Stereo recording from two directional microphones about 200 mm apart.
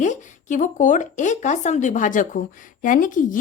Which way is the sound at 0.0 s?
40° left (ahead or behind).